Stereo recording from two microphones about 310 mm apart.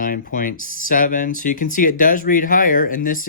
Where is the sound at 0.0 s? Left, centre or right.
Left.